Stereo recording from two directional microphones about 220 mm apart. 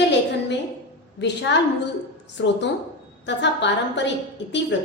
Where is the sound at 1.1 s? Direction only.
55° left (ahead or behind).